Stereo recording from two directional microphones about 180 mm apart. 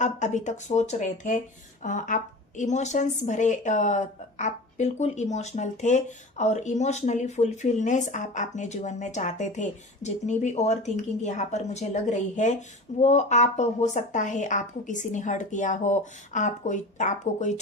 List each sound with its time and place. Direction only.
0.0 s a woman's voice: 40° left (ahead or behind)